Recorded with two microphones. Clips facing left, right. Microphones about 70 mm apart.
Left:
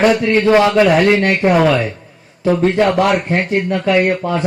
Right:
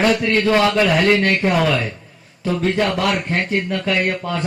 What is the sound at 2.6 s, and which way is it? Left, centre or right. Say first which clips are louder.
A man's voice: left 5 dB; centre.